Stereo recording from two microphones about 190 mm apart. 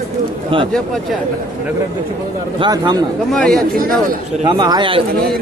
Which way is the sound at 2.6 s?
25° right (ahead or behind).